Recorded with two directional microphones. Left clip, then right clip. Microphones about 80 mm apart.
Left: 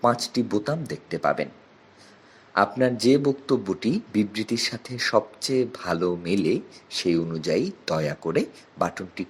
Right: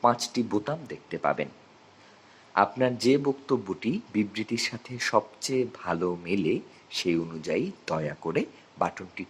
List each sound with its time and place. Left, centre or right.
0.0 s speech: left
0.7 s speech: left
2.7 s speech: left